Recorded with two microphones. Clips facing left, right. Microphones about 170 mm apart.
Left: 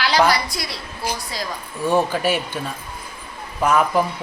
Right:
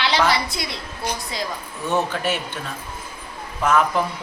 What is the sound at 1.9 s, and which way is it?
Speech, 10° left (ahead or behind).